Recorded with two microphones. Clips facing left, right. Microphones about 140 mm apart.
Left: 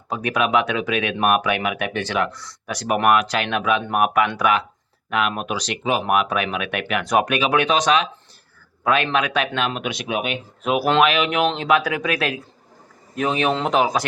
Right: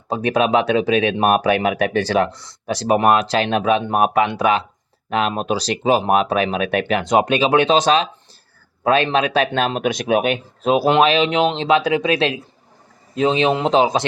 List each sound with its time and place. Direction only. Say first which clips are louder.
0.1 s a man's voice: right 4 dB; 30° right (ahead or behind); by 10.3 s 45° right (ahead or behind)
10.6 s a man's voice: right 3 dB; 30° right (ahead or behind)